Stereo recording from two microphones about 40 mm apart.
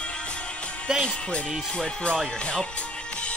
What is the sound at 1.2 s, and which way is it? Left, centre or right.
Speech, left.